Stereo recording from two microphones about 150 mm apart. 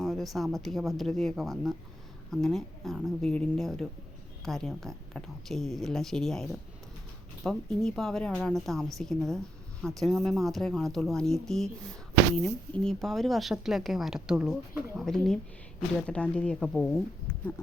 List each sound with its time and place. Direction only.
0.0 s speech: centre (ahead or behind)